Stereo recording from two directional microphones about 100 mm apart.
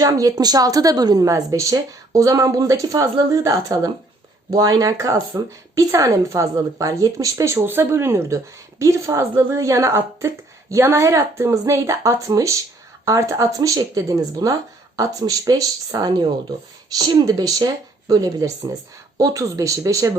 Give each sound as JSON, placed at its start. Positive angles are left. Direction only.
{"t": 0.0, "sound": "speech", "side_deg": -35}